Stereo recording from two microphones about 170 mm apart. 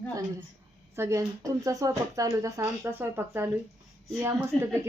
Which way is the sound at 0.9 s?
15° right (ahead or behind).